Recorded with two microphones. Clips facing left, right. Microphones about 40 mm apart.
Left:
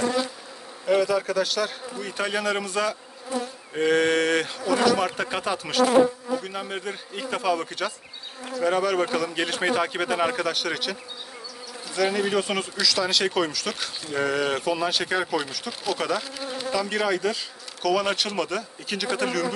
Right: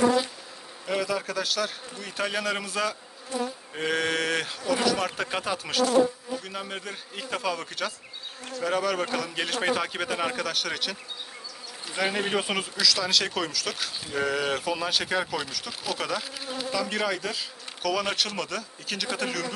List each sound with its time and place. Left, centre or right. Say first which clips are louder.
0.8 s speech: left 6 dB; centre
11.8 s bee: left 4 dB; right
12.4 s speech: left 1 dB; centre